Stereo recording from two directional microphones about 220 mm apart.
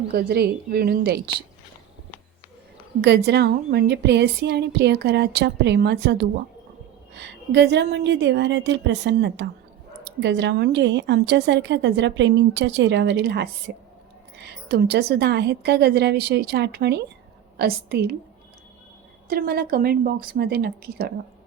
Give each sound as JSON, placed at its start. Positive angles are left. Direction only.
{"t": 0.1, "sound": "a woman's voice", "side_deg": -45}
{"t": 3.0, "sound": "a woman's voice", "side_deg": -50}
{"t": 19.3, "sound": "a woman's voice", "side_deg": -45}